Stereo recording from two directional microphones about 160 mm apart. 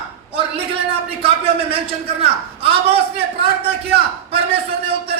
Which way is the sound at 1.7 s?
35° right (ahead or behind).